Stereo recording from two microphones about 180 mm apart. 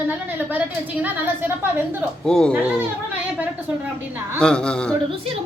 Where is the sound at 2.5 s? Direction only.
10° right (ahead or behind).